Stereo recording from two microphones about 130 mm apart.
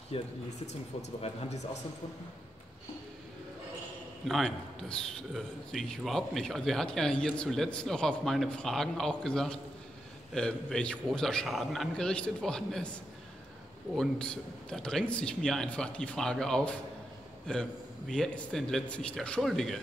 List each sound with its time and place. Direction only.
0.1 s speech: 50° left (ahead or behind)
1.2 s speech: 60° left (ahead or behind)
4.3 s a man's voice: 5° left (ahead or behind)
13.9 s a man's voice: 5° left (ahead or behind)